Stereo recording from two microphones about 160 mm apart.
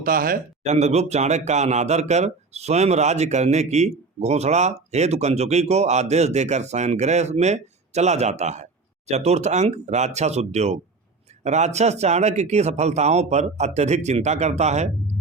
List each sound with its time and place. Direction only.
0.0 s speech: 65° right (ahead or behind)
0.6 s speech: 45° right (ahead or behind)